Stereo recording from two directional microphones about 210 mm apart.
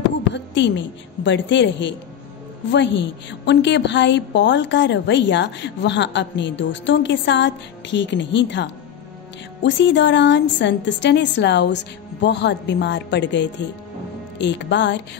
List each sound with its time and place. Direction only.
0.3 s a woman's voice: 55° left (ahead or behind)